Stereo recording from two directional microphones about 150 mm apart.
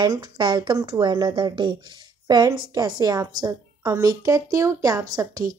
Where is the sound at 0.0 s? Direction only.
30° right (ahead or behind).